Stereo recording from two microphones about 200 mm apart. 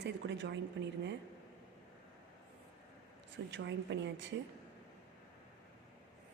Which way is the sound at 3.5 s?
60° right (ahead or behind).